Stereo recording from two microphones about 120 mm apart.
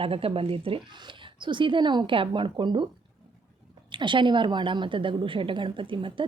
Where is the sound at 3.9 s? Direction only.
40° right (ahead or behind).